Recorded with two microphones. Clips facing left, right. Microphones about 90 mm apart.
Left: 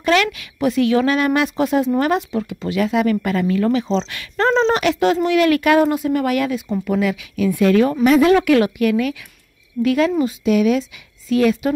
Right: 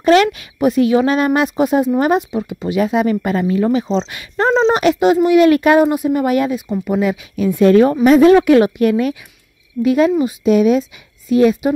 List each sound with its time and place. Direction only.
0.0 s a woman's voice: 30° right (ahead or behind)
1.6 s speech: 15° right (ahead or behind)
4.5 s speech: 5° right (ahead or behind)
4.7 s speech: 20° right (ahead or behind)